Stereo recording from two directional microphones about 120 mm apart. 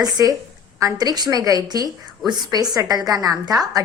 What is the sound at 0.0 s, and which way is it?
A woman's voice, 30° right (ahead or behind).